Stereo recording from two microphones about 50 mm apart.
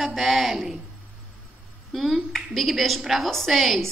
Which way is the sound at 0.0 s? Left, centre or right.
Centre.